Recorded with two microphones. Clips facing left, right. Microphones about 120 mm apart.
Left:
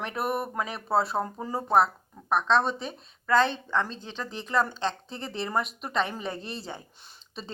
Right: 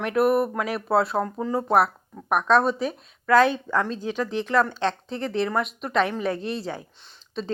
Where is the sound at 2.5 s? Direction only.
5° right (ahead or behind).